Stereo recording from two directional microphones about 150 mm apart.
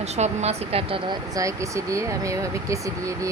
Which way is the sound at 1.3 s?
20° right (ahead or behind).